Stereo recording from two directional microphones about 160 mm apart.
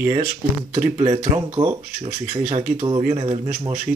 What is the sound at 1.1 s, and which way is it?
Speech, 30° right (ahead or behind).